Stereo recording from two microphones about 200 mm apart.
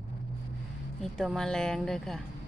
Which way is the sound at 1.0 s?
Centre (ahead or behind).